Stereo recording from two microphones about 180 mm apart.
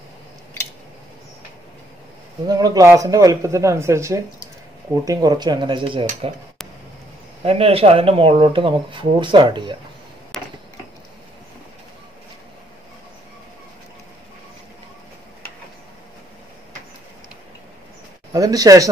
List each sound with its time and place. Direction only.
2.4 s speech: 20° right (ahead or behind)
7.4 s speech: 35° right (ahead or behind)
10.3 s tick-tock: centre (ahead or behind)
18.3 s speech: 20° right (ahead or behind)